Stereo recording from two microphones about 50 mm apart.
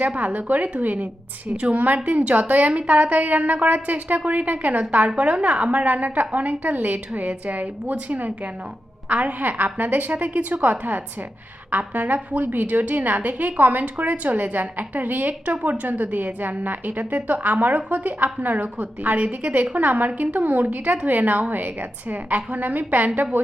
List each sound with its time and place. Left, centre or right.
0.0 s a woman's voice: right